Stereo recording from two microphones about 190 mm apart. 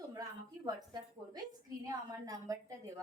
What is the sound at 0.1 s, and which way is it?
A woman's voice, 20° right (ahead or behind).